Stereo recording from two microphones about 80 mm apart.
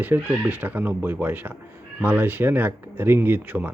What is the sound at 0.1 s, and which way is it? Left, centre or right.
Speech, right.